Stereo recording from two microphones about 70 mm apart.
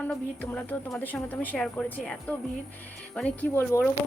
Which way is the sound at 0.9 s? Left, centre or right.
Left.